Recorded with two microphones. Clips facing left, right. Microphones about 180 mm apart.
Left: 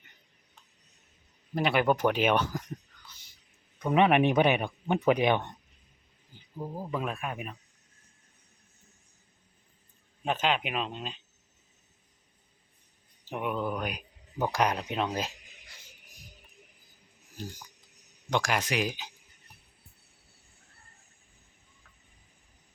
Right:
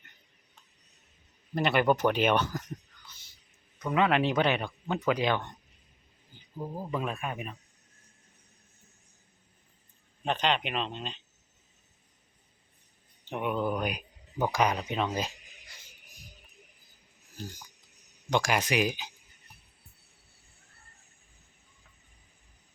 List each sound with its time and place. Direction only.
1.5 s speech: 5° left (ahead or behind)
3.8 s speech: 25° left (ahead or behind)
6.6 s speech: 5° left (ahead or behind)
10.2 s speech: 5° left (ahead or behind)
13.2 s speech: 5° left (ahead or behind)
18.3 s speech: 5° right (ahead or behind)